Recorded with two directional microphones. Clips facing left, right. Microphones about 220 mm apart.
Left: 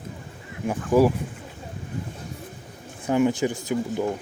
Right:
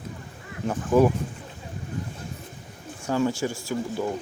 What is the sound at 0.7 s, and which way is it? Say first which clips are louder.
Speech: left 1 dB; 10° left (ahead or behind).